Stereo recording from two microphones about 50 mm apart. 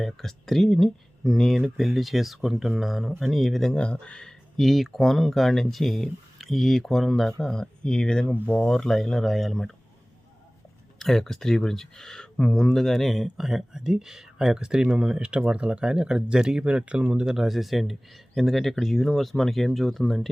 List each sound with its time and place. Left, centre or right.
0.0 s speech: centre
3.8 s speech: left; by 7.3 s centre
7.4 s speech: centre
11.0 s speech: centre